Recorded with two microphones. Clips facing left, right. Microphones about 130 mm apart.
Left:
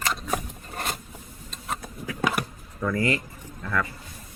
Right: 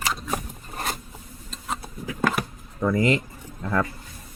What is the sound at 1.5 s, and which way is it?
Vehicle, centre (ahead or behind).